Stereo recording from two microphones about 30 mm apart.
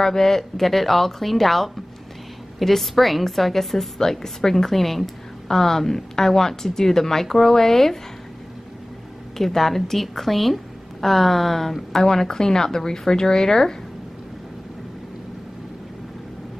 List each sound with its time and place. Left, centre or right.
0.0 s a woman's voice: centre
9.4 s a woman's voice: centre
12.0 s speech: left